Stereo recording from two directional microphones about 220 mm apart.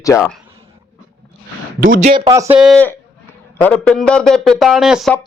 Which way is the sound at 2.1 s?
25° right (ahead or behind).